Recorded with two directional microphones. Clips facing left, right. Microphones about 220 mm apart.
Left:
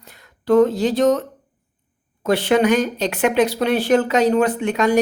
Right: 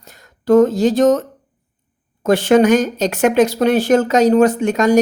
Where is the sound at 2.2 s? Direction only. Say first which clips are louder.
Right 4 dB; 45° right (ahead or behind).